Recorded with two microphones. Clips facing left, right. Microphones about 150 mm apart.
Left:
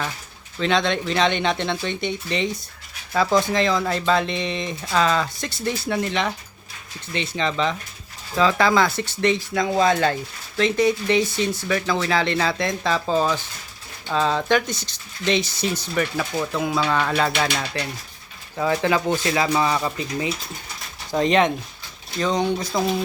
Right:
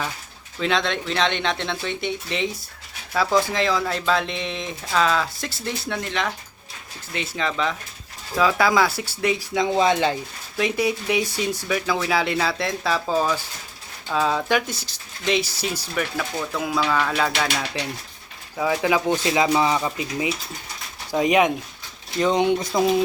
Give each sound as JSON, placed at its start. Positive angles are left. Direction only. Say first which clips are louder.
{"t": 0.6, "sound": "speech", "louder": "left 2 dB", "side_deg": 0}